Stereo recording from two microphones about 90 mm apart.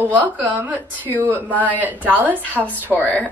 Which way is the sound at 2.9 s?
Centre (ahead or behind).